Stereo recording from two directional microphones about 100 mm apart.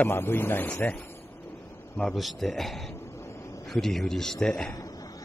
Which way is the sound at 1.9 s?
Centre (ahead or behind).